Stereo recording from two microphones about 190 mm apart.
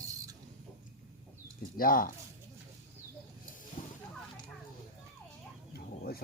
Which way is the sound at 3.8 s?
45° left (ahead or behind).